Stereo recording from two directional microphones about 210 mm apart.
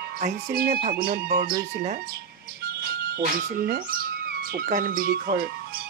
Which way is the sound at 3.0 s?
45° right (ahead or behind).